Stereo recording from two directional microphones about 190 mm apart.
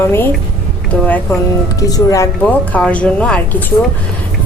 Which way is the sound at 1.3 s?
15° left (ahead or behind).